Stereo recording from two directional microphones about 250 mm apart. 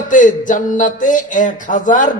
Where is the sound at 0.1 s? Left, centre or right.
Left.